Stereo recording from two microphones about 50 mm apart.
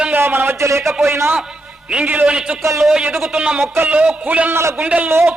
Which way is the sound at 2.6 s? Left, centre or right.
Right.